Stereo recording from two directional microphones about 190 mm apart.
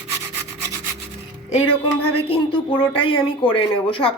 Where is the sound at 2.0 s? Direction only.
30° left (ahead or behind).